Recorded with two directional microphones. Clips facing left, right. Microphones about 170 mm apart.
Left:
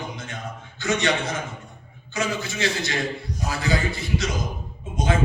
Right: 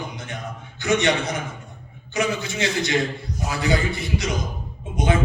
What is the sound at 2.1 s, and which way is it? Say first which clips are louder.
A man's voice: right 3 dB; 20° right (ahead or behind).